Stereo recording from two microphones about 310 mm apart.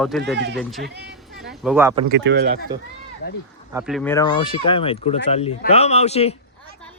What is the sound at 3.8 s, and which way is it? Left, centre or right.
Speech, centre.